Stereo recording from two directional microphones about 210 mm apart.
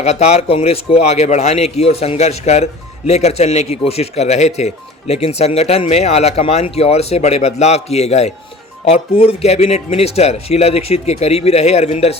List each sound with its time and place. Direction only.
0.0 s speech: 30° left (ahead or behind)